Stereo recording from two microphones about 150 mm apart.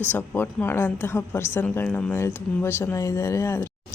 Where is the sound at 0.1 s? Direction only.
10° left (ahead or behind).